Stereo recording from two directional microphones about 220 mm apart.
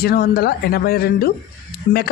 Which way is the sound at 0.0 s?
45° left (ahead or behind).